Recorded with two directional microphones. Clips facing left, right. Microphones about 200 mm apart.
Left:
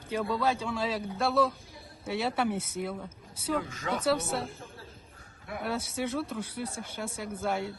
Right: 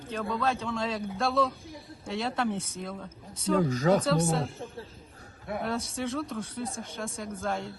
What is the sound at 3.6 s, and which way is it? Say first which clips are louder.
Speech: right 10 dB; 40° right (ahead or behind).